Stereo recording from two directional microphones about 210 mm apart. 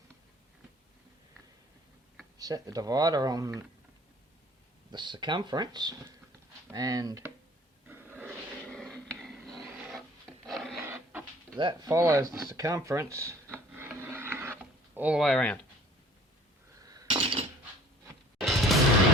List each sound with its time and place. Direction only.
2.4 s speech: 15° right (ahead or behind)
4.9 s speech: 20° right (ahead or behind)
7.9 s a sound: 10° right (ahead or behind)
8.6 s a sound: 5° left (ahead or behind)
10.4 s filing: centre (ahead or behind)
10.8 s printer: 10° right (ahead or behind)
11.5 s speech: 20° right (ahead or behind)
12.5 s wood: 15° right (ahead or behind); by 15.5 s 5° left (ahead or behind)
16.7 s a sound: 15° right (ahead or behind)
18.3 s music: centre (ahead or behind)